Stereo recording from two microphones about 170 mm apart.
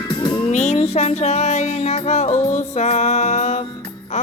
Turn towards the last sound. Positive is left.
turn(degrees=45)  # may be behind; listen again after turning